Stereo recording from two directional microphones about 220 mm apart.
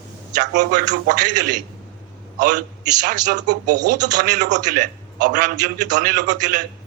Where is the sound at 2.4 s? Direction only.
35° right (ahead or behind).